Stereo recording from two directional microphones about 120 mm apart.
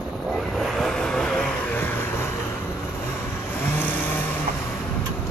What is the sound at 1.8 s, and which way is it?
Vehicle, 15° left (ahead or behind).